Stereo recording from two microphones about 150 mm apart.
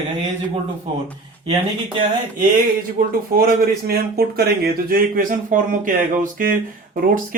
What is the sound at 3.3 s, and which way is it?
A man's voice, 90° right.